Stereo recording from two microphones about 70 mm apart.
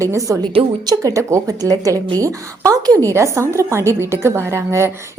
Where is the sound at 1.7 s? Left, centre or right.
Right.